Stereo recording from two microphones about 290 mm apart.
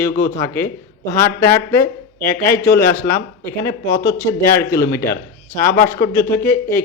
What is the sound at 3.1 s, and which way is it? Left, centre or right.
Speech, left.